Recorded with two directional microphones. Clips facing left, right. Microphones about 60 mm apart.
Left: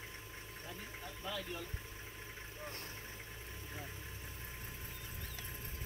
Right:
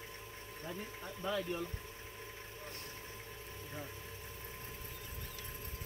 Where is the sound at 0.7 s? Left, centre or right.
Right.